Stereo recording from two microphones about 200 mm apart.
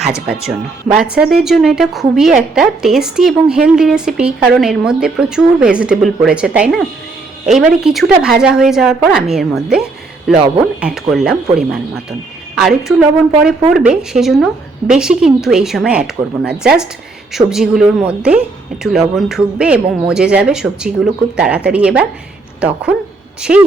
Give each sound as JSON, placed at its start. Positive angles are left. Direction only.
{"t": 1.1, "sound": "a woman's voice", "side_deg": -5}